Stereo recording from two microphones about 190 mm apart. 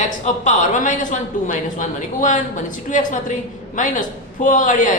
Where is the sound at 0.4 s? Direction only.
40° left (ahead or behind).